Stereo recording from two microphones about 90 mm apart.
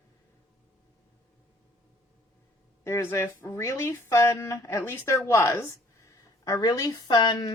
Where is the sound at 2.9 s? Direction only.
30° left (ahead or behind).